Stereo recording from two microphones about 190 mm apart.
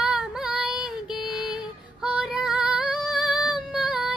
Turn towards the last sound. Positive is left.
turn(degrees=-5)  # may be behind; listen again after turning